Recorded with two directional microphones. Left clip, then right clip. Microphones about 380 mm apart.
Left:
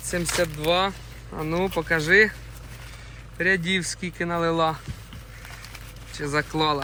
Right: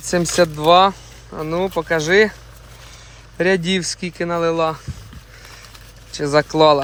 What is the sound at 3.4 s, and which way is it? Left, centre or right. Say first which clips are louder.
Speech: right 5 dB; centre.